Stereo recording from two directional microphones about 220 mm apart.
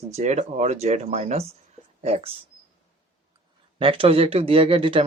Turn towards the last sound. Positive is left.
turn(degrees=-25)  # may be behind; listen again after turning